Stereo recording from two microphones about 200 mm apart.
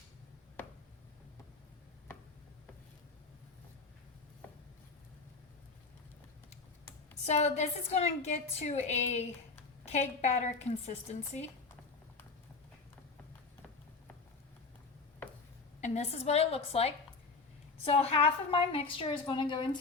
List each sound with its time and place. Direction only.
7.3 s a woman's voice: 35° left (ahead or behind)
15.8 s a woman's voice: 30° left (ahead or behind)